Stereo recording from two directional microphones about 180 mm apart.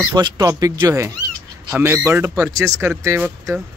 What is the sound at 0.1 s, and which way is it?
Speech, 20° right (ahead or behind).